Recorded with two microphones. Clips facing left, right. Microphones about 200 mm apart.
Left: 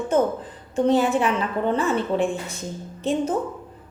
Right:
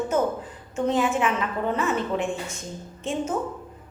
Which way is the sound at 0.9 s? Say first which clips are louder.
Left 3 dB; 35° left (ahead or behind).